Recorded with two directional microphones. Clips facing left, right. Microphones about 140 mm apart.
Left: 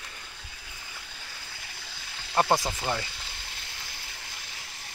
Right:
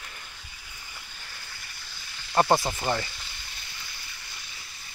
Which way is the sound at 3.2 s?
90° left.